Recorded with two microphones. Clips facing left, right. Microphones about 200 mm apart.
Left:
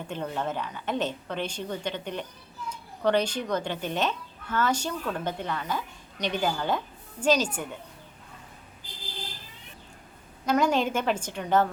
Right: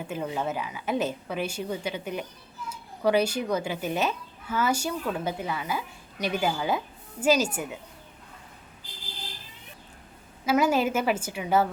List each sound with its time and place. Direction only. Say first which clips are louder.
0.0 s speech: right 1 dB; 5° right (ahead or behind)
10.4 s speech: right 1 dB; 5° right (ahead or behind)